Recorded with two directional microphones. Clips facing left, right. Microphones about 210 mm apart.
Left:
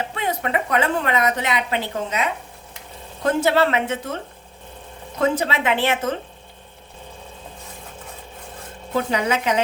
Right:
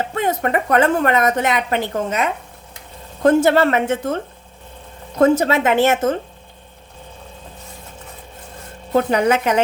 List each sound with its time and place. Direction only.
0.0 s a woman's voice: 45° right (ahead or behind)
5.2 s a woman's voice: 45° right (ahead or behind)
8.9 s a woman's voice: 50° right (ahead or behind)